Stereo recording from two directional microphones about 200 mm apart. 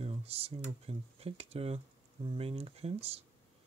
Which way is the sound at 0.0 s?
30° right (ahead or behind).